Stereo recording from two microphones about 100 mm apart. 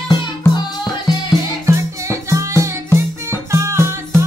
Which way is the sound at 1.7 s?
30° right (ahead or behind).